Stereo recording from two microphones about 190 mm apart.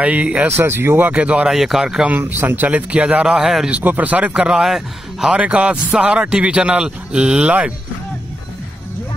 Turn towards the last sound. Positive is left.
turn(degrees=-5)  # may be behind; listen again after turning